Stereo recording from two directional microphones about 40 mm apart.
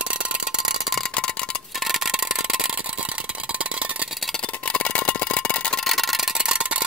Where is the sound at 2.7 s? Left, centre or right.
Right.